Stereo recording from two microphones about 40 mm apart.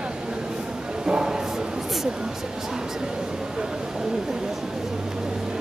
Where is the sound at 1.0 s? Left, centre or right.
Right.